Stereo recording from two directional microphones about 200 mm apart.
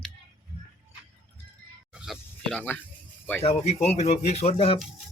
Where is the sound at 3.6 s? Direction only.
35° left (ahead or behind).